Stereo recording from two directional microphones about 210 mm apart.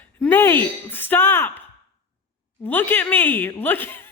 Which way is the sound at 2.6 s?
10° left (ahead or behind).